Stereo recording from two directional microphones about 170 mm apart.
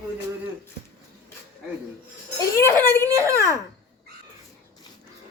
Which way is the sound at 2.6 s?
15° left (ahead or behind).